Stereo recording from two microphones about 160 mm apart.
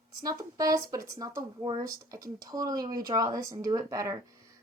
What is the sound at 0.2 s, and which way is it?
Speech, 25° right (ahead or behind).